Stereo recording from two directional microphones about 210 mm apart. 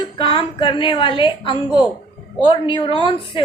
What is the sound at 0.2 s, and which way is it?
Speech, 25° left (ahead or behind).